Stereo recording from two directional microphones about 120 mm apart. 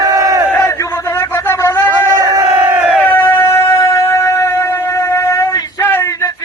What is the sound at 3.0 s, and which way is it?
Music, 15° left (ahead or behind).